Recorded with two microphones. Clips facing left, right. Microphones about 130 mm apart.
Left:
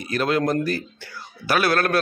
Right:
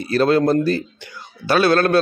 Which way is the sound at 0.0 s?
30° right (ahead or behind).